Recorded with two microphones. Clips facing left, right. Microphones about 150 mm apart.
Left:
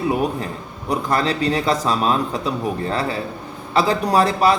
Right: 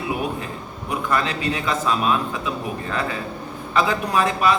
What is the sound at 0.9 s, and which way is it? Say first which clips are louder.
Speech: left 3 dB; 35° left (ahead or behind).